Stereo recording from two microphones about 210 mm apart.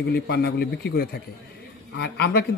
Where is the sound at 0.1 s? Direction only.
50° left (ahead or behind).